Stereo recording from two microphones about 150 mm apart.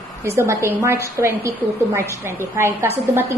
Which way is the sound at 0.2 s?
20° right (ahead or behind).